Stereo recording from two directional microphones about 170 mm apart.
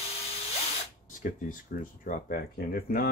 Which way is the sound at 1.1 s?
55° left (ahead or behind).